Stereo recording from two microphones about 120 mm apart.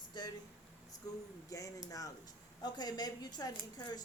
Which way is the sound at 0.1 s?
35° left (ahead or behind).